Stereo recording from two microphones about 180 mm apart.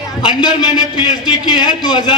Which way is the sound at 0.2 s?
25° left (ahead or behind).